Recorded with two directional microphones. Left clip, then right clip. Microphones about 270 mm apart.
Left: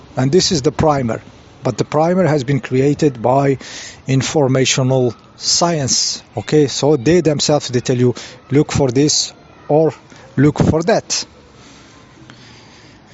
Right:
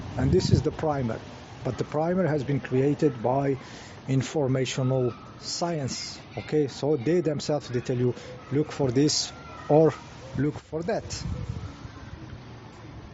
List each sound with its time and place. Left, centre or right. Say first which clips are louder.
0.2 s speech: left 11 dB; left
9.6 s speech: left 7 dB; centre
10.4 s speech: left 16 dB; left